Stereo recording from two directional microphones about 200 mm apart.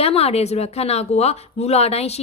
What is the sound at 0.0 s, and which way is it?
A woman's voice, 30° left (ahead or behind).